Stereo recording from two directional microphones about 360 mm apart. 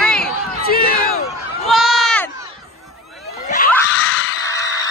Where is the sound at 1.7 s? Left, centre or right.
Centre.